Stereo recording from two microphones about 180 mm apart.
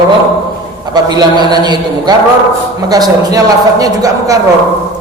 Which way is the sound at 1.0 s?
20° right (ahead or behind).